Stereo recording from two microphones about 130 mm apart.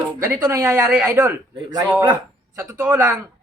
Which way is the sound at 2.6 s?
20° right (ahead or behind).